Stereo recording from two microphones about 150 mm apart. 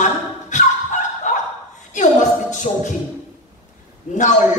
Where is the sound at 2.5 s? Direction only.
55° left (ahead or behind).